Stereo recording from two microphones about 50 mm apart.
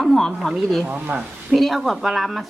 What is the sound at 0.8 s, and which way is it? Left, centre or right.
Speech, right.